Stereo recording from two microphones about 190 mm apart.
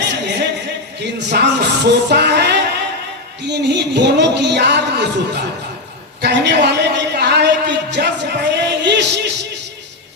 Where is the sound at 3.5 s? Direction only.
60° right (ahead or behind).